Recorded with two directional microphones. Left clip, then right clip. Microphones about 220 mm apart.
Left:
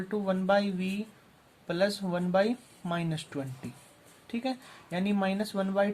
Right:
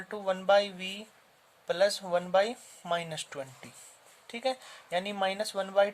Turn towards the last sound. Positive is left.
turn(degrees=-40)  # may be behind; listen again after turning